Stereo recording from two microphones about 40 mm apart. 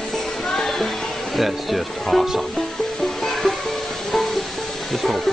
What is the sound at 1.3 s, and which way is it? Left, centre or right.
Speech, centre.